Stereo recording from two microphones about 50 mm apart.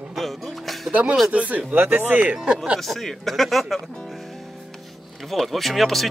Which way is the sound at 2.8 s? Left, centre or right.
Centre.